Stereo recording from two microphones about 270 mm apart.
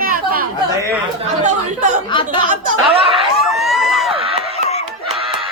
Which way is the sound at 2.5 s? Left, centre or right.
Right.